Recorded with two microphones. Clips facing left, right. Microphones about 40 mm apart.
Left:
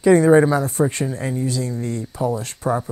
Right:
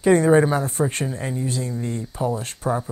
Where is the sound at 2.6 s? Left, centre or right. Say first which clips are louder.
Left 3 dB; left.